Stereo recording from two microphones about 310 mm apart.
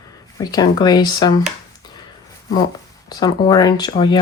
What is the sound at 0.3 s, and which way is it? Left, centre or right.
Speech, centre.